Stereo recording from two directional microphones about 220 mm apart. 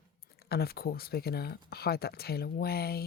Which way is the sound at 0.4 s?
45° left (ahead or behind).